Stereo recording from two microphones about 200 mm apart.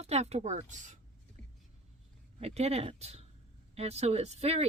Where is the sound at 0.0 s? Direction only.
30° right (ahead or behind).